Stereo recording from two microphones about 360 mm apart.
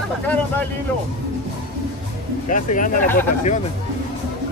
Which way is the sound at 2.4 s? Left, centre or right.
Left.